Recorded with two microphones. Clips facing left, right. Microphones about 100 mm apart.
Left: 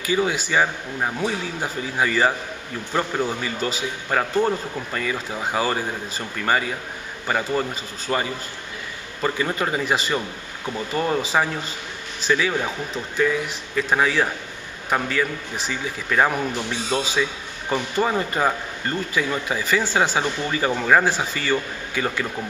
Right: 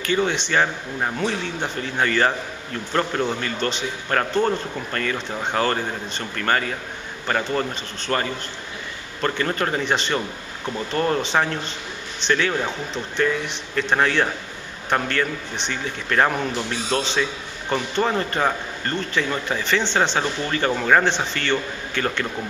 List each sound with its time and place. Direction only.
0.0 s a man's voice: 5° left (ahead or behind)